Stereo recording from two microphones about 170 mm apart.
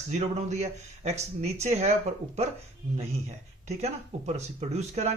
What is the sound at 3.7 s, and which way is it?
Speech, 40° right (ahead or behind).